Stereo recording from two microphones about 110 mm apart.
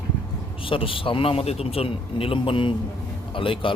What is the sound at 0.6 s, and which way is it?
A man's voice, 55° left (ahead or behind).